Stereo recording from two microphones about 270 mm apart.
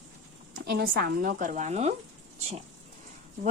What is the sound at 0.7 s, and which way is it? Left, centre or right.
A woman's voice, right.